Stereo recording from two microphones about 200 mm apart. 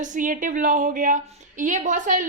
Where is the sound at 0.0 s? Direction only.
40° right (ahead or behind).